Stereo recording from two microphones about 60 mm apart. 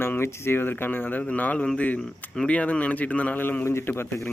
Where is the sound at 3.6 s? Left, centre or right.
Left.